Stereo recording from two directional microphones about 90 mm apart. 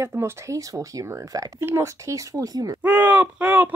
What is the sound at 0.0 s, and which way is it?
Speech, 30° right (ahead or behind).